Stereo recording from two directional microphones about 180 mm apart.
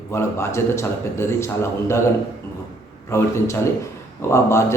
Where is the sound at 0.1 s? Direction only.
15° left (ahead or behind).